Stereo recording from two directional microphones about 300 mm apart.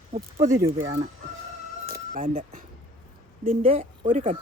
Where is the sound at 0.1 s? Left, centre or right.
Right.